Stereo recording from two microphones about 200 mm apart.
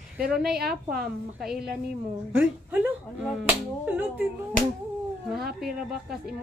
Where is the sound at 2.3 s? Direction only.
10° right (ahead or behind).